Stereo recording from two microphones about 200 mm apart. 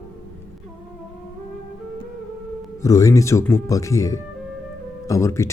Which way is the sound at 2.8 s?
15° left (ahead or behind).